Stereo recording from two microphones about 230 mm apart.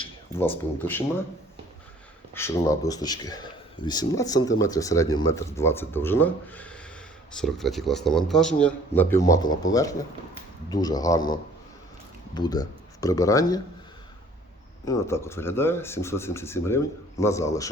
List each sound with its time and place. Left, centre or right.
0.0 s a sound: centre
0.8 s speech: centre
2.3 s speech: centre
14.8 s speech: centre